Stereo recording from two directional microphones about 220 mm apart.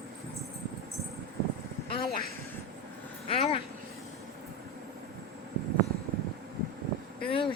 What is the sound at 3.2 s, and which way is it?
Speech, 25° left (ahead or behind).